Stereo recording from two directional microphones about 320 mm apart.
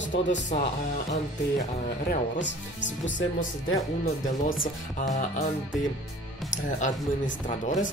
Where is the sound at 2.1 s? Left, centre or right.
Left.